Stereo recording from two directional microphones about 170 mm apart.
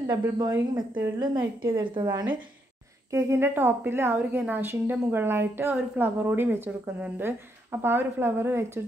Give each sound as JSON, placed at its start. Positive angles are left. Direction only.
{"t": 0.0, "sound": "a woman's voice", "side_deg": -20}